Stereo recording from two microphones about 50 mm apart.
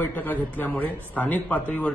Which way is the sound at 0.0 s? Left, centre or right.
Left.